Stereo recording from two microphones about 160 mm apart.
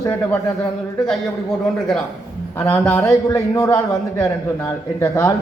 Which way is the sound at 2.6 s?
15° left (ahead or behind).